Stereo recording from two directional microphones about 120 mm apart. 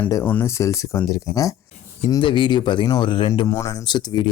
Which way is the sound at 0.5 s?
25° left (ahead or behind).